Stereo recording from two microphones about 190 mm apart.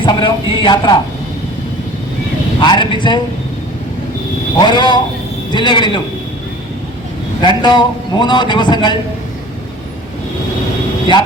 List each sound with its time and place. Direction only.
0.0 s a man's voice: 25° left (ahead or behind)
2.6 s a man's voice: 25° left (ahead or behind)
4.6 s a man's voice: 25° left (ahead or behind)
7.4 s a man's voice: 25° left (ahead or behind)